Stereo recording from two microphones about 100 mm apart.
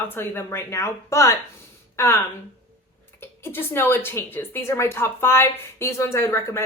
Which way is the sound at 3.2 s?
25° left (ahead or behind).